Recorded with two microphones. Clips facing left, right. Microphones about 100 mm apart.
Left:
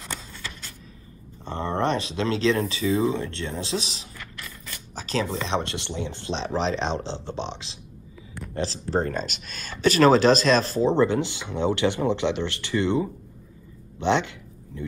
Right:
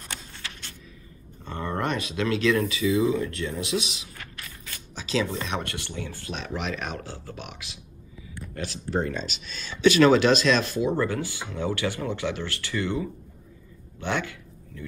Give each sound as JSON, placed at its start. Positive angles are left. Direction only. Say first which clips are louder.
{"t": 1.4, "sound": "speech", "louder": "left 4 dB", "side_deg": 30}